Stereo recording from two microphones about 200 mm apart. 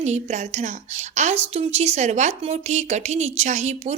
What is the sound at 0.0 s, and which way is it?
A woman's voice, 35° right (ahead or behind).